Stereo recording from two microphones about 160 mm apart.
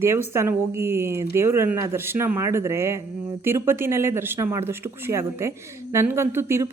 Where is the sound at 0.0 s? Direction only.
15° right (ahead or behind).